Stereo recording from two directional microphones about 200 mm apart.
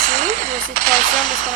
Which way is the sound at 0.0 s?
40° right (ahead or behind).